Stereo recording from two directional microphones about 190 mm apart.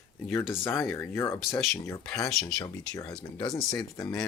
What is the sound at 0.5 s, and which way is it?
Speech, 15° left (ahead or behind).